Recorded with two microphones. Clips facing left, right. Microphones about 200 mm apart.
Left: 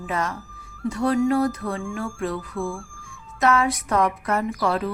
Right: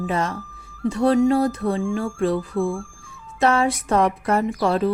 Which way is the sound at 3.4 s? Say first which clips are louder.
Right 2 dB; 30° right (ahead or behind).